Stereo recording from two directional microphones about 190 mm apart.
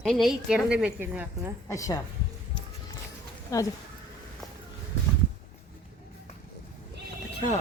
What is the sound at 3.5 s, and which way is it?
Speech, 15° left (ahead or behind).